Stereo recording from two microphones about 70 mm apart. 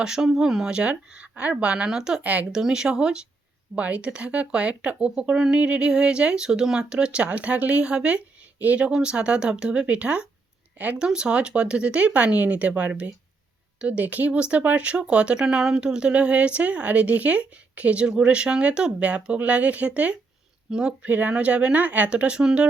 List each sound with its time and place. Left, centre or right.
0.0 s speech: centre
2.2 s speech: right
2.5 s speech: centre